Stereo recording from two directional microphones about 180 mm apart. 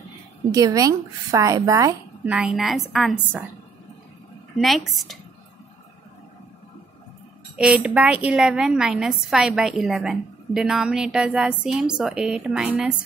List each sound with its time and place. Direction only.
0.5 s a woman's voice: 20° right (ahead or behind)
2.2 s a woman's voice: 5° right (ahead or behind)
4.6 s a woman's voice: centre (ahead or behind)
7.5 s a woman's voice: 5° right (ahead or behind)